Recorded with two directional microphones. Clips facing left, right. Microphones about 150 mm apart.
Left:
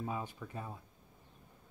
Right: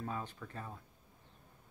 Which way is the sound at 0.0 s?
10° left (ahead or behind).